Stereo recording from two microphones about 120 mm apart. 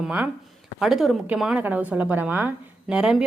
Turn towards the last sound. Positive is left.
turn(degrees=-5)  # may be behind; listen again after turning